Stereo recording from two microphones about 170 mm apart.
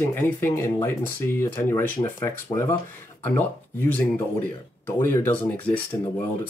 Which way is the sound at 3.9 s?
10° left (ahead or behind).